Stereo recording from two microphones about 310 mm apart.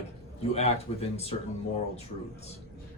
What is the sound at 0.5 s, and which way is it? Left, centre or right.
Speech, centre.